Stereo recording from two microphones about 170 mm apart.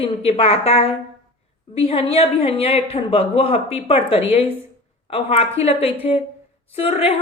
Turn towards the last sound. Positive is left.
turn(degrees=35)  # may be behind; listen again after turning